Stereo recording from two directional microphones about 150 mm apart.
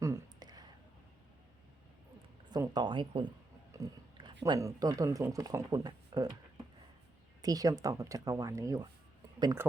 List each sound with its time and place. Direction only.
0.0 s a sound: 25° right (ahead or behind)
2.5 s speech: 30° right (ahead or behind)
3.7 s speech: 25° right (ahead or behind)
7.4 s speech: 25° right (ahead or behind)